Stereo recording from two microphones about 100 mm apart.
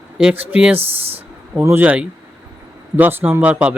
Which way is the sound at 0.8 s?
75° right (ahead or behind).